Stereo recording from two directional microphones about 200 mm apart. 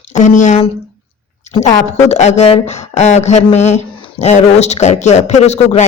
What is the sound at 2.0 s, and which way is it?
Speech, 35° left (ahead or behind).